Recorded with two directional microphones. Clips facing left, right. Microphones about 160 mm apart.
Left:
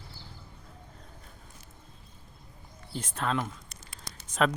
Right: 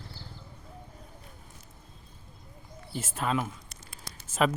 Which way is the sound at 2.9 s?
5° right (ahead or behind).